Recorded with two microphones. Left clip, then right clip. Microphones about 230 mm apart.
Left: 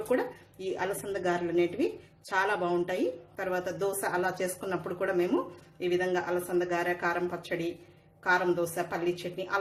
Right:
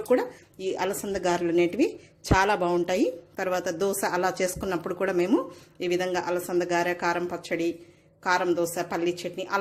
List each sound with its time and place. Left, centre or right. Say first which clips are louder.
0.1 s a woman's voice: right 6 dB; right